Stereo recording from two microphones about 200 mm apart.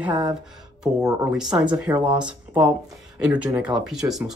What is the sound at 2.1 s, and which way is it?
Speech, 5° right (ahead or behind).